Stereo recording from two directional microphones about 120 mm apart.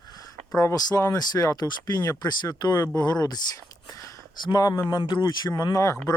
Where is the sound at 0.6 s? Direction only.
30° left (ahead or behind).